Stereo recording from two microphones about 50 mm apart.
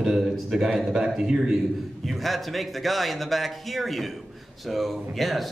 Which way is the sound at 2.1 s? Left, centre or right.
Centre.